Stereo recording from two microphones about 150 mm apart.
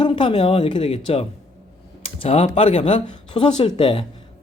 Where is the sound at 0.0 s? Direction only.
35° left (ahead or behind).